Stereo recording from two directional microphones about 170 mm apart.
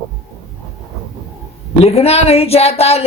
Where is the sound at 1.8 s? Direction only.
35° left (ahead or behind).